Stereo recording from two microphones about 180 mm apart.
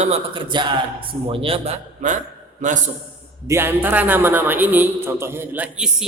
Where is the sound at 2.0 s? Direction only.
45° right (ahead or behind).